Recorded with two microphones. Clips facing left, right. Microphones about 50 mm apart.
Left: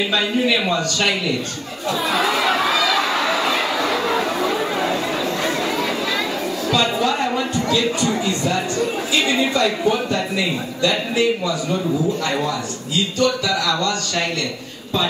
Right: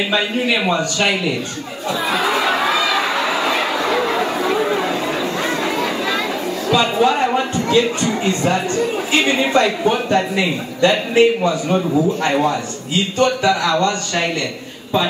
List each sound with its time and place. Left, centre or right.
0.1 s a man's voice: centre
1.9 s a sound: centre
4.5 s chatter: centre
5.4 s a sound: centre
6.7 s speech: right
9.1 s a man's voice: right